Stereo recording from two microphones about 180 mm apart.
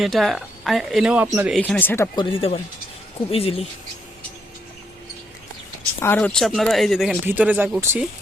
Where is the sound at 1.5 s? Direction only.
5° left (ahead or behind).